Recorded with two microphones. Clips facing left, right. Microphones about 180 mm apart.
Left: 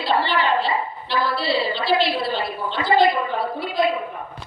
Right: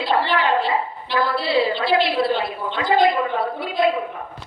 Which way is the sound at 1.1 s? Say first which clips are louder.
Right 2 dB; 50° right (ahead or behind).